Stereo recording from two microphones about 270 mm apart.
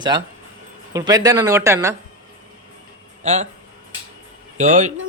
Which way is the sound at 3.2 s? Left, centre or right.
Right.